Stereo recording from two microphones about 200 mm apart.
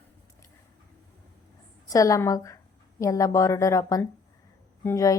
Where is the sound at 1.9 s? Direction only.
15° left (ahead or behind).